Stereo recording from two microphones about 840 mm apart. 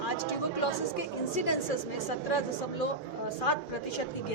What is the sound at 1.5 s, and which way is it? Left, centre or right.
A woman's voice, left.